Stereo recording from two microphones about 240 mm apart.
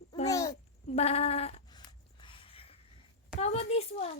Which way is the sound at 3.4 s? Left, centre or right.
Left.